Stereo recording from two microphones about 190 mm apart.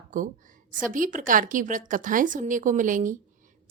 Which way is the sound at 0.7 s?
45° right (ahead or behind).